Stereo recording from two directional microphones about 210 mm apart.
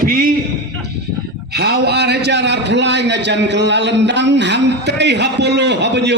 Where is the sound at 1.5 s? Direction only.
50° right (ahead or behind).